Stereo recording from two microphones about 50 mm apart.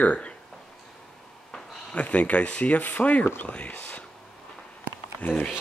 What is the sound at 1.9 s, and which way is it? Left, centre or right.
Speech, left.